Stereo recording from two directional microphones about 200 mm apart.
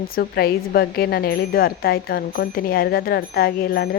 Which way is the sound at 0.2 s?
50° left (ahead or behind).